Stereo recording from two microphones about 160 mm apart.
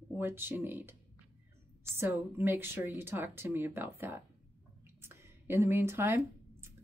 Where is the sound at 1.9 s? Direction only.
15° right (ahead or behind).